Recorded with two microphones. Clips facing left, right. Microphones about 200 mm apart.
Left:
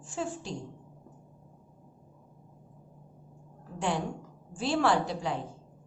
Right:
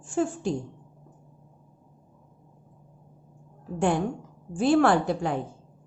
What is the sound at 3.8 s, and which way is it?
Speech, 50° right (ahead or behind).